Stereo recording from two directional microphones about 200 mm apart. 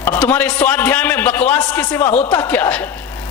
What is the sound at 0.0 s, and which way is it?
A man's voice, 10° left (ahead or behind).